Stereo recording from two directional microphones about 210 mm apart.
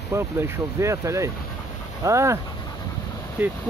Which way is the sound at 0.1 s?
15° right (ahead or behind).